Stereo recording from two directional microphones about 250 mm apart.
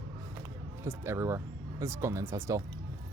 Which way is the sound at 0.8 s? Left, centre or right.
Centre.